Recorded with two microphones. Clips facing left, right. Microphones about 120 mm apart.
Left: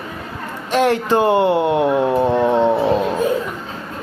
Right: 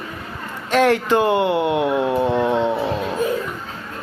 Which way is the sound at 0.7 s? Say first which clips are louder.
Even; 25° left (ahead or behind).